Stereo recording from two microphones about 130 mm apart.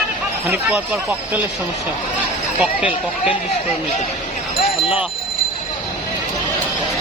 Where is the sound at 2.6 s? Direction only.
10° right (ahead or behind).